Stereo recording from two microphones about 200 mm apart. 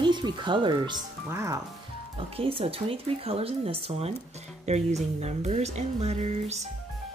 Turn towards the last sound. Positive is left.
turn(degrees=-35)  # may be behind; listen again after turning